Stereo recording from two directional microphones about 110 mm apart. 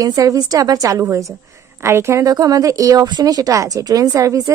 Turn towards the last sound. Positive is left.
turn(degrees=-30)  # may be behind; listen again after turning